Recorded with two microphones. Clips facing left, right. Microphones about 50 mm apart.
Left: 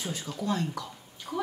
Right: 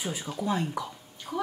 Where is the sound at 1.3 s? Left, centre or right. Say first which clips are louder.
Right 1 dB; centre.